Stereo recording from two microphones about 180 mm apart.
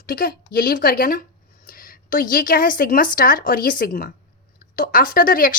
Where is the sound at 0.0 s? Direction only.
55° left (ahead or behind).